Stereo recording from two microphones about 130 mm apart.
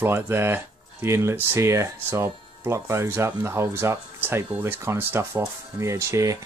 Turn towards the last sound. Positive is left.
turn(degrees=-25)  # may be behind; listen again after turning